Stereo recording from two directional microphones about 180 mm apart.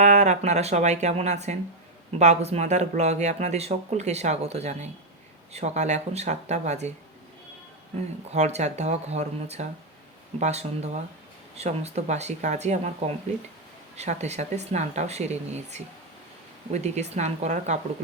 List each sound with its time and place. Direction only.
0.0 s speech: 40° right (ahead or behind)
8.3 s speech: 35° right (ahead or behind)
13.9 s speech: 40° right (ahead or behind)